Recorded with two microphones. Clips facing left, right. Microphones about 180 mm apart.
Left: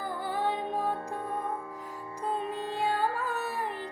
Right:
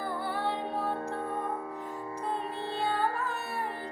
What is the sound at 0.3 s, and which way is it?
Music, 15° left (ahead or behind).